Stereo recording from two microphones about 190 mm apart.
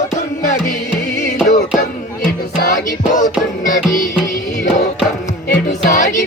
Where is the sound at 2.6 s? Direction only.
45° left (ahead or behind).